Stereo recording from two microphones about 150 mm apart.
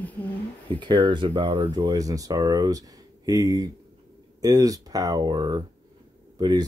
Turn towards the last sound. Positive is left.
turn(degrees=-25)  # may be behind; listen again after turning